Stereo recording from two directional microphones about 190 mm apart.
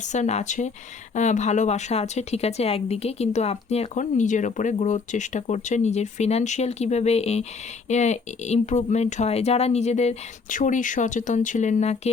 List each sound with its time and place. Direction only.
0.0 s a woman's voice: 40° left (ahead or behind)